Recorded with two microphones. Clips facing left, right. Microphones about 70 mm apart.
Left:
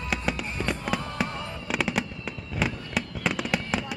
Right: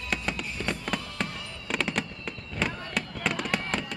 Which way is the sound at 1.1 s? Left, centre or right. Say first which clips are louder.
Left 4 dB; centre.